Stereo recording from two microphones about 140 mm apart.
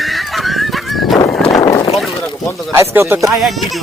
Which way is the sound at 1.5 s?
25° left (ahead or behind).